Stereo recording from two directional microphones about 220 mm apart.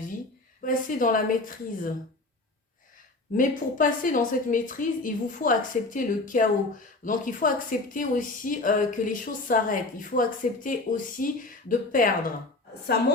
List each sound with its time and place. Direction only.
0.6 s speech: 40° left (ahead or behind)
3.3 s speech: 35° left (ahead or behind)